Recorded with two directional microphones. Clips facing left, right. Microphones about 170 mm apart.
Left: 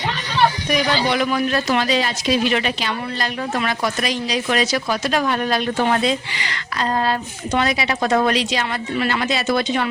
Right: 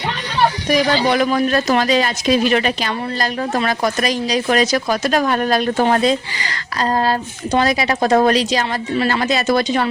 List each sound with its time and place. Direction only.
0.7 s speech: 40° right (ahead or behind)